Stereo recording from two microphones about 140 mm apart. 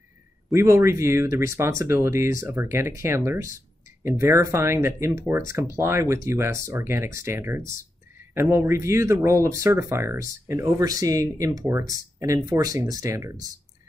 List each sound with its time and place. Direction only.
0.5 s speech: 20° right (ahead or behind)